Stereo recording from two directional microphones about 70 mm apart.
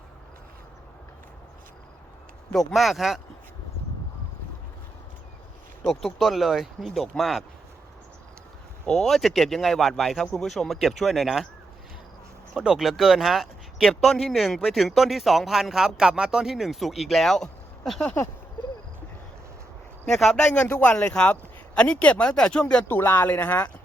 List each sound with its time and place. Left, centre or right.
2.5 s speech: centre
5.9 s speech: centre
8.9 s speech: centre
12.5 s speech: centre
20.1 s speech: centre
20.3 s speech: centre
20.7 s a man's voice: left
20.9 s speech: centre
22.9 s speech: left